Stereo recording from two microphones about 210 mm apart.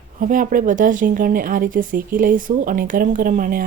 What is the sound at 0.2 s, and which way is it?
Speech, 40° right (ahead or behind).